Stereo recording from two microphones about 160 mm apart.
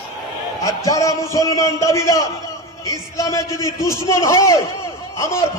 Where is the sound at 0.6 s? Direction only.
20° left (ahead or behind).